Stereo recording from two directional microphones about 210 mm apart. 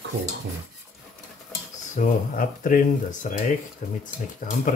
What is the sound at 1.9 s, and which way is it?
Speech, 40° left (ahead or behind).